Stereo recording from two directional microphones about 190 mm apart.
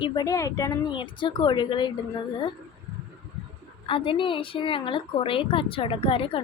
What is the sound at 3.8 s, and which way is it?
A woman's voice, 25° left (ahead or behind).